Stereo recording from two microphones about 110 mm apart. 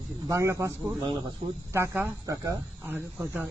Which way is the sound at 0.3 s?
30° right (ahead or behind).